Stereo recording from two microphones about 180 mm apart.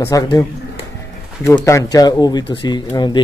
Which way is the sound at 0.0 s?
15° left (ahead or behind).